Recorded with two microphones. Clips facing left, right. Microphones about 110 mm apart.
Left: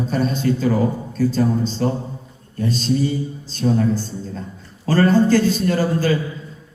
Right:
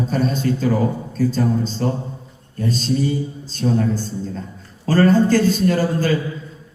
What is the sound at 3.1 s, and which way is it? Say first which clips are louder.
Music: right 1 dB; 40° right (ahead or behind).